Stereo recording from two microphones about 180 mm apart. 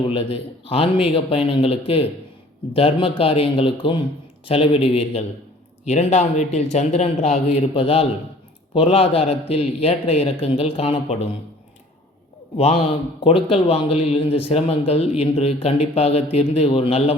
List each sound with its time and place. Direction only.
0.1 s a man's voice: 30° left (ahead or behind)
12.5 s a man's voice: 35° left (ahead or behind)